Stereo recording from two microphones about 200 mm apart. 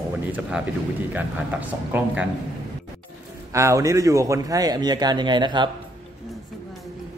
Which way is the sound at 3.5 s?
15° right (ahead or behind).